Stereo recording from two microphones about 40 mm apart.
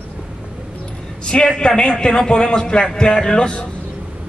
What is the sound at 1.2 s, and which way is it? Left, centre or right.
A man's voice, left.